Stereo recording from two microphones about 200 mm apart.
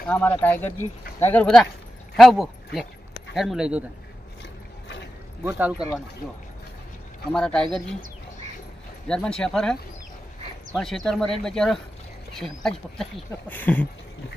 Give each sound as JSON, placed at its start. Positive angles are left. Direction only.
{"t": 0.0, "sound": "speech", "side_deg": 10}
{"t": 5.4, "sound": "speech", "side_deg": -10}
{"t": 7.3, "sound": "speech", "side_deg": 5}
{"t": 9.0, "sound": "speech", "side_deg": 5}
{"t": 10.8, "sound": "speech", "side_deg": 0}